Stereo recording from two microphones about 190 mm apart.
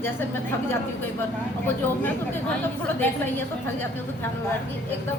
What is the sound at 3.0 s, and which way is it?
Speech, 10° left (ahead or behind).